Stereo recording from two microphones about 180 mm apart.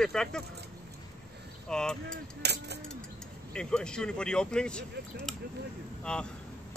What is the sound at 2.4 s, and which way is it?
Speech, 70° right (ahead or behind).